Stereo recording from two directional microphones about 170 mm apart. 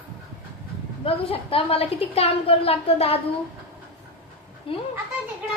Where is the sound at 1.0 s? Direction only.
35° left (ahead or behind).